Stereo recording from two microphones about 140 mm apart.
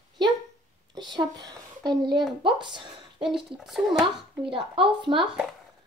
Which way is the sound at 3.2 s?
Centre (ahead or behind).